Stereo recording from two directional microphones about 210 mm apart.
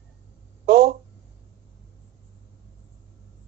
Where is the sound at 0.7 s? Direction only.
50° right (ahead or behind).